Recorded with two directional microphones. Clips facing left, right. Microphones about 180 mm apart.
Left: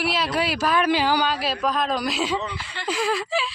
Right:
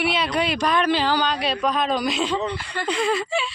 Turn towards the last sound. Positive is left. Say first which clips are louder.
# right 1 dB
turn(degrees=0)  # may be behind; listen again after turning